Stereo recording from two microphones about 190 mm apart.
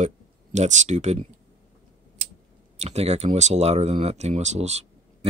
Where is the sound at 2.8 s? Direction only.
35° right (ahead or behind).